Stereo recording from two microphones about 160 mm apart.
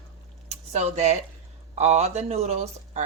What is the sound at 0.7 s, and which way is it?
Speech, 45° right (ahead or behind).